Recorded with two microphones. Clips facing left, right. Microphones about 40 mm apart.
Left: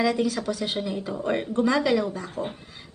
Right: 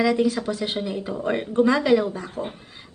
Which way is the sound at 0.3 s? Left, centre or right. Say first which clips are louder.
Right 3 dB; right.